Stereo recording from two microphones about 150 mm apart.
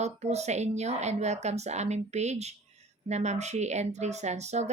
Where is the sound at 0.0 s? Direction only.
45° right (ahead or behind).